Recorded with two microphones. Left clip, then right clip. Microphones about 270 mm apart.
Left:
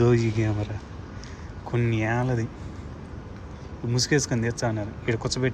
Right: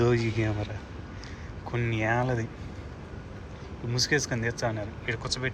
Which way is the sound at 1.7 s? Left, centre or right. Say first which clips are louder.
Left 1 dB; centre.